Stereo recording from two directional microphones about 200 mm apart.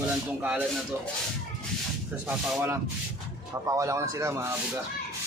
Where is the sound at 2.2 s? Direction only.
10° right (ahead or behind).